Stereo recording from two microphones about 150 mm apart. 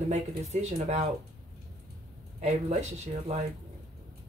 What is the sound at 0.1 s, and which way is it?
Speech, 50° right (ahead or behind).